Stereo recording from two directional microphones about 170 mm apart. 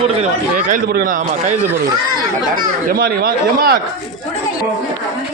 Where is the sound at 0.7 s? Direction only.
55° right (ahead or behind).